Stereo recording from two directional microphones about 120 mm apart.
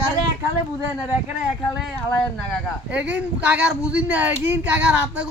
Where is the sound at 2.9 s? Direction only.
10° right (ahead or behind).